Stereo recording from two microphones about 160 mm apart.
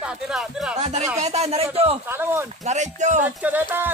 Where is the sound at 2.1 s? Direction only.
15° right (ahead or behind).